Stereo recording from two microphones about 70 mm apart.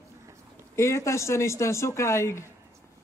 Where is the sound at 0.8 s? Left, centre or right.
Left.